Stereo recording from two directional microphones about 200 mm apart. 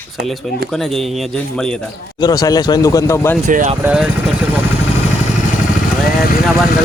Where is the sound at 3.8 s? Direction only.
5° right (ahead or behind).